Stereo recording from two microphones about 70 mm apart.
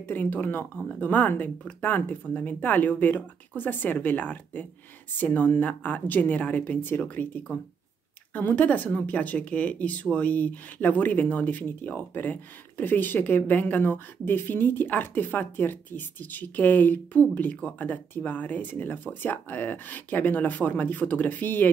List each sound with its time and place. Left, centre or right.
0.1 s speech: left